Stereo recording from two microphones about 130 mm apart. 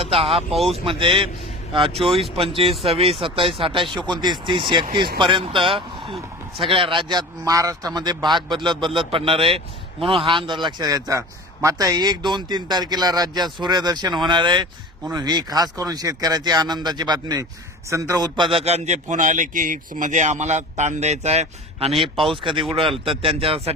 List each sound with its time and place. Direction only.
0.0 s speech: 50° right (ahead or behind)
0.5 s speech: centre (ahead or behind)
0.9 s a man's voice: 40° right (ahead or behind); by 18.3 s 25° right (ahead or behind)
18.5 s speech: 55° right (ahead or behind)
22.1 s speech: centre (ahead or behind)
22.7 s speech: 45° right (ahead or behind)